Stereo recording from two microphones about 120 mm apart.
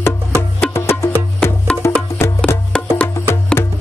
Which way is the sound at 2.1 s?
20° left (ahead or behind).